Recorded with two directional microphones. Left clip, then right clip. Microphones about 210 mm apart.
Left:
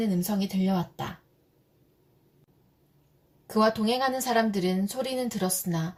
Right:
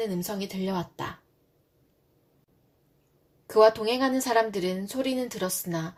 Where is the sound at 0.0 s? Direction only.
35° right (ahead or behind).